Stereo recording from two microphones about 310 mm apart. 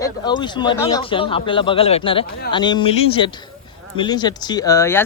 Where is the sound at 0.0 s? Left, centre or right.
Centre.